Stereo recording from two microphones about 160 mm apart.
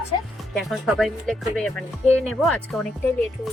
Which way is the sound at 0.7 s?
Centre (ahead or behind).